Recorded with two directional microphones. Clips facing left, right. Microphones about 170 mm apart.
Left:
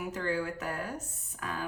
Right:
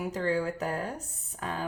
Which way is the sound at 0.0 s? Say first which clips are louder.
Right 4 dB; 35° right (ahead or behind).